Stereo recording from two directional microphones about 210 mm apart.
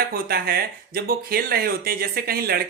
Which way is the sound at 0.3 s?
45° right (ahead or behind).